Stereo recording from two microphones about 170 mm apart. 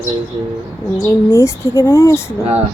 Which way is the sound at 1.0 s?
15° left (ahead or behind).